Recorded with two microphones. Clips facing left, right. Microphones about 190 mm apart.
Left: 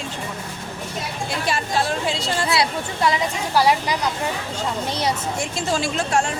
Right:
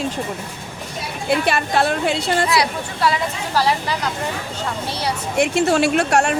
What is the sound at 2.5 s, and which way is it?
Speech, 25° left (ahead or behind).